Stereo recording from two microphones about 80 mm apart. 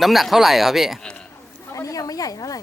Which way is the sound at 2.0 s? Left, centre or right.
Left.